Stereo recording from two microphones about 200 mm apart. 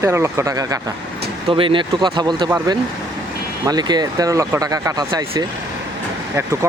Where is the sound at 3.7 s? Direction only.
20° right (ahead or behind).